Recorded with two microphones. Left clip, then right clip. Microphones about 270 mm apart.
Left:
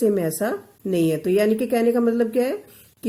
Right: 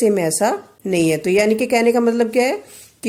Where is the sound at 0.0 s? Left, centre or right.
Right.